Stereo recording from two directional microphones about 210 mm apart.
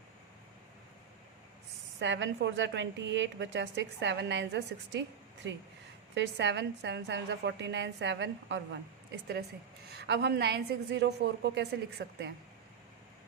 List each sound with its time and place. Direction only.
2.0 s a woman's voice: 60° right (ahead or behind)